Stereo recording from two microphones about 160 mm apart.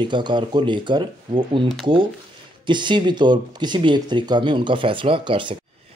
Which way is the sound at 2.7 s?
30° right (ahead or behind).